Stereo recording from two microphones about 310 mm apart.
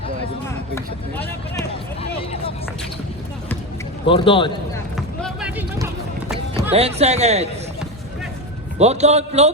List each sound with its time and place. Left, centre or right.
4.0 s a man's voice: centre
4.9 s music: centre; by 7.4 s right
8.8 s a man's voice: right